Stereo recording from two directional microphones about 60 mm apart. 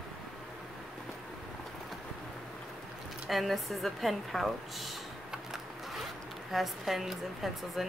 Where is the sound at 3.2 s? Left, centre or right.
Centre.